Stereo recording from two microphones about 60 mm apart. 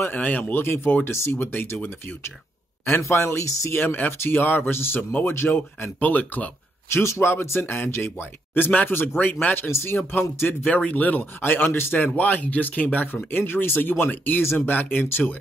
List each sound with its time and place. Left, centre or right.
0.0 s speech: left
1.5 s speech: left
3.1 s speech: left
3.8 s speech: left
6.9 s speech: left